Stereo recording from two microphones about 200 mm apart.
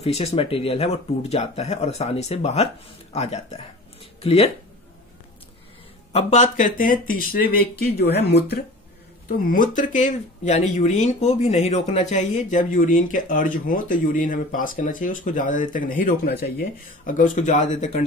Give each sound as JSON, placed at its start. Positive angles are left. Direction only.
{"t": 0.0, "sound": "speech", "side_deg": 30}
{"t": 4.0, "sound": "a sound", "side_deg": 30}
{"t": 6.1, "sound": "speech", "side_deg": 35}
{"t": 9.5, "sound": "speech", "side_deg": 40}